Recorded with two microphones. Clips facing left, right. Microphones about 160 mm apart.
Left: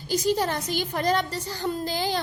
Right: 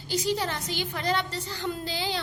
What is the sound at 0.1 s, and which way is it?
A woman's voice, 45° left (ahead or behind).